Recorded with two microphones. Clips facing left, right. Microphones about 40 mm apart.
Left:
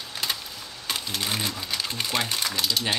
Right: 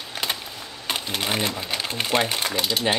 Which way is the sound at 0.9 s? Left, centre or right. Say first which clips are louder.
Right 3 dB; right.